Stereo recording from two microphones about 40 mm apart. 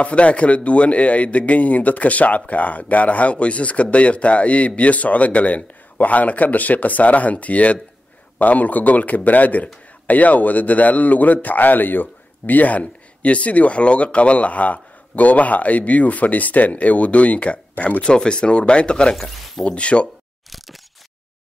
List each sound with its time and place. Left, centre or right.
0.0 s a man's voice: left
18.0 s speech: left
19.1 s speech: centre
19.6 s speech: left
20.4 s a sound: centre